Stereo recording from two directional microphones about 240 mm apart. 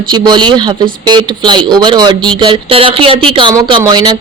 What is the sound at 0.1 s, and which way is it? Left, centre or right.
Speech, centre.